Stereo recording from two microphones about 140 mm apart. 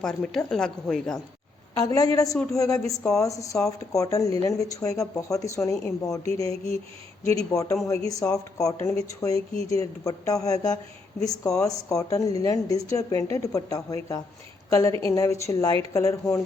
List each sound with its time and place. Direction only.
0.0 s a woman's voice: 5° left (ahead or behind)
1.8 s a woman's voice: 25° left (ahead or behind)